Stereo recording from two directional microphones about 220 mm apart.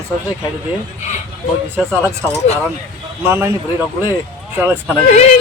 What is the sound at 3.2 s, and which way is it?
Speech, 10° right (ahead or behind).